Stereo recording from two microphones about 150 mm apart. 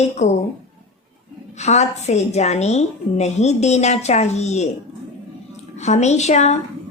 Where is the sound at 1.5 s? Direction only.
45° left (ahead or behind).